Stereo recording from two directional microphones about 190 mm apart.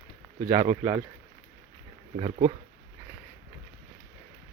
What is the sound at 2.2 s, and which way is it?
Speech, 35° right (ahead or behind).